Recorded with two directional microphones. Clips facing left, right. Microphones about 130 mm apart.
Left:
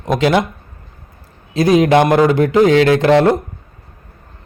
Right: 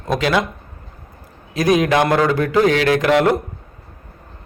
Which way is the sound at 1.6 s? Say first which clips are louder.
Left 4 dB; 25° left (ahead or behind).